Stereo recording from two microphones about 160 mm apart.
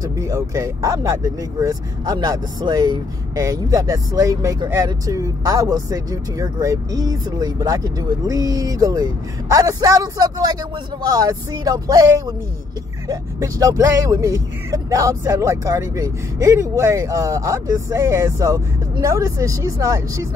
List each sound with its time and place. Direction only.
0.2 s speech: 20° right (ahead or behind)
13.1 s speech: 20° right (ahead or behind)